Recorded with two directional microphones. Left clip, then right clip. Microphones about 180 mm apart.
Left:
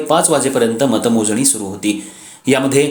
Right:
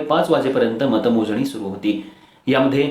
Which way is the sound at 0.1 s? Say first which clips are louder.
Left 3 dB; 40° left (ahead or behind).